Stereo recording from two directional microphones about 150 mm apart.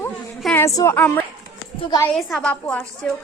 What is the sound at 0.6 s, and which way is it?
A woman's voice, 20° left (ahead or behind).